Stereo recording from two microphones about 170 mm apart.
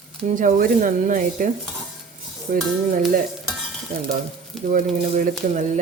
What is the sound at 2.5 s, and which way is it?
Cutlery, 55° right (ahead or behind).